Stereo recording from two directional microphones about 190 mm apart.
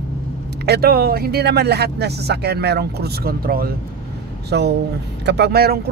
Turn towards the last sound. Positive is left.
turn(degrees=-55)  # may be behind; listen again after turning